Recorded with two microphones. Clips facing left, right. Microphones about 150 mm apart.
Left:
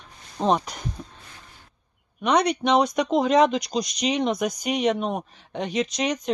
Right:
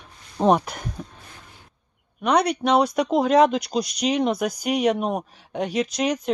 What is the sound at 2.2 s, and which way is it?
Speech, 5° right (ahead or behind).